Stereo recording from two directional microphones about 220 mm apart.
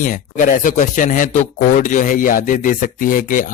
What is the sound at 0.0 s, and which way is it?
Speech, 35° left (ahead or behind).